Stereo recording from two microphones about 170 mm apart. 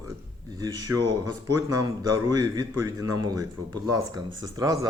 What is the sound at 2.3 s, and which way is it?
Speech, 20° right (ahead or behind).